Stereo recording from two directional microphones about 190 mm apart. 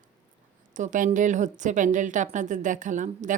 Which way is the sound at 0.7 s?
40° right (ahead or behind).